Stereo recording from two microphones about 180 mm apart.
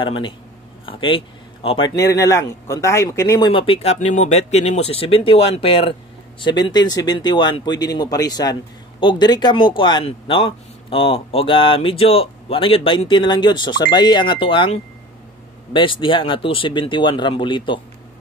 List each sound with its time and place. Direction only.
0.0 s a man's voice: 30° left (ahead or behind)
2.0 s a man's voice: 20° left (ahead or behind)